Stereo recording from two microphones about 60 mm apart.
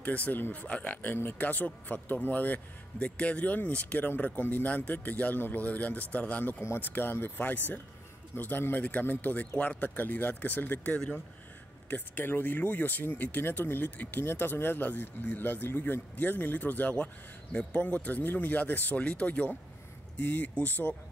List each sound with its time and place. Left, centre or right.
0.0 s a man's voice: left
6.6 s speech: left
11.0 s speech: centre
11.9 s speech: left